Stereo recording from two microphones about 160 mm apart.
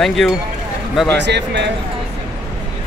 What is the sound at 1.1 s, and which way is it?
Speech, 90° right.